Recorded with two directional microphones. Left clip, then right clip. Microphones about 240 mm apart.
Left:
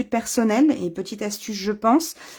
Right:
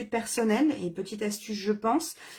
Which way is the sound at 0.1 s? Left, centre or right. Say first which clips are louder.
Left 5 dB; left.